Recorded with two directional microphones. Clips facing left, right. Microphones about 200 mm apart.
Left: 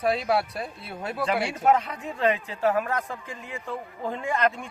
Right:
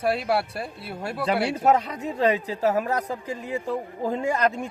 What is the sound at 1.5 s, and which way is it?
Speech, 35° right (ahead or behind).